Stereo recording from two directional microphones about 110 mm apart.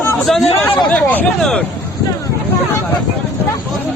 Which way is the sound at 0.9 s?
15° left (ahead or behind).